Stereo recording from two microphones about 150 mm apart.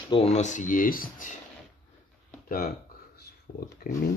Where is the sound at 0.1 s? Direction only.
45° left (ahead or behind); by 1.3 s 70° left (ahead or behind).